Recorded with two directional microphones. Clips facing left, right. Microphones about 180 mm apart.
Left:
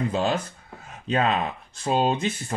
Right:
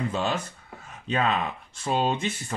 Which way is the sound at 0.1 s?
35° left (ahead or behind).